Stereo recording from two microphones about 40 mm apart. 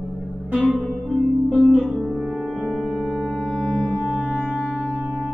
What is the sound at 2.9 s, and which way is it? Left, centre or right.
Music, centre.